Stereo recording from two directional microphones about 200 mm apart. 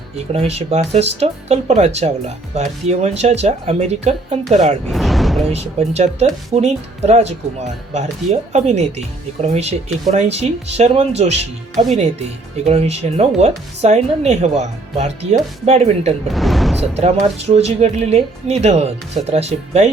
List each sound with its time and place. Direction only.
0.2 s speech: 30° right (ahead or behind)
4.9 s music: centre (ahead or behind)
5.5 s speech: 30° right (ahead or behind)
16.3 s speech: centre (ahead or behind)
16.9 s speech: 30° right (ahead or behind)